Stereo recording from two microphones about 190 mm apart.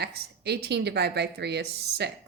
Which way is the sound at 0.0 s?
55° right (ahead or behind).